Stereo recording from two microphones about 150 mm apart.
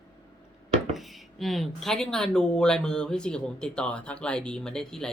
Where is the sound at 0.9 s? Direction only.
Centre (ahead or behind).